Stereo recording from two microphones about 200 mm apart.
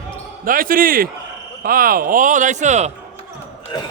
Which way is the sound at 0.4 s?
45° right (ahead or behind).